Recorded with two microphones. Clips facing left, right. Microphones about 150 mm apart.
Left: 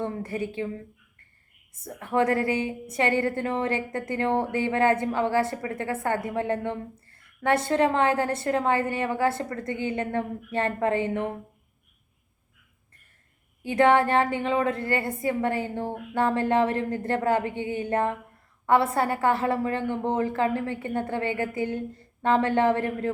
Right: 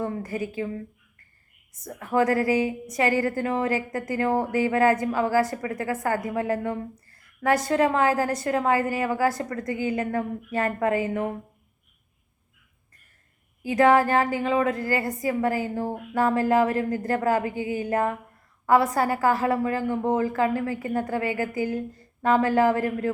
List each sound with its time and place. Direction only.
0.0 s a woman's voice: 30° left (ahead or behind)
1.7 s a woman's voice: 25° left (ahead or behind)
13.6 s a woman's voice: 30° left (ahead or behind)